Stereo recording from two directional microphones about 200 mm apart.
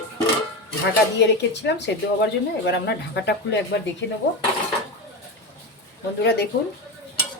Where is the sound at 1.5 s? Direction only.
60° left (ahead or behind).